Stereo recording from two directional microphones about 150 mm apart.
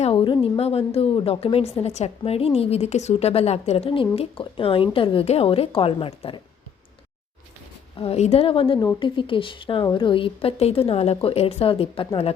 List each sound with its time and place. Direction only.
0.0 s a woman's voice: 35° left (ahead or behind)
7.9 s a woman's voice: 40° left (ahead or behind)